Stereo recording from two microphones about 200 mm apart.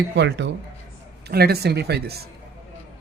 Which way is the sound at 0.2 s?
60° right (ahead or behind).